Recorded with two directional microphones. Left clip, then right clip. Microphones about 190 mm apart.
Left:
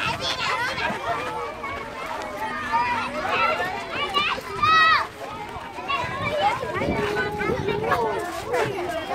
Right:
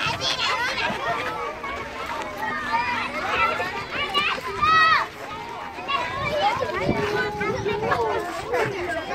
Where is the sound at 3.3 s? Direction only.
45° right (ahead or behind).